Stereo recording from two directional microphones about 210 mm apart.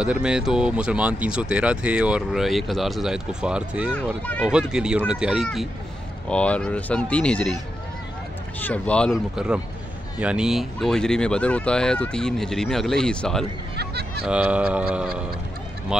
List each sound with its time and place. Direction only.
0.0 s speech: 5° right (ahead or behind)
8.5 s speech: 5° left (ahead or behind)
13.7 s a sound: 50° right (ahead or behind)
14.2 s speech: 5° right (ahead or behind)